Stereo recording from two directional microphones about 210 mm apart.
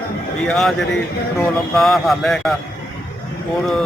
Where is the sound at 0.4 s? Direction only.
Centre (ahead or behind).